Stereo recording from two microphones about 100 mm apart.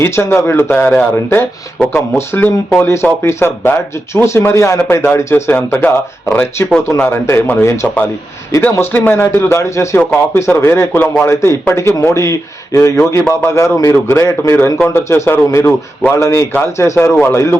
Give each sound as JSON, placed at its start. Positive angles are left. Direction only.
{"t": 0.0, "sound": "speech", "side_deg": 25}
{"t": 8.7, "sound": "speech", "side_deg": 20}